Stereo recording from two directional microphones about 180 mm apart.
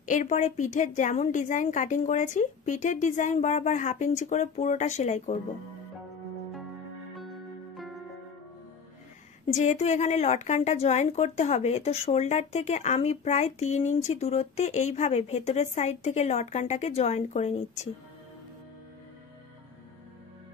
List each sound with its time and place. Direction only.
0.0 s a woman's voice: 45° left (ahead or behind)
7.7 s music: centre (ahead or behind)
9.5 s a woman's voice: 40° left (ahead or behind)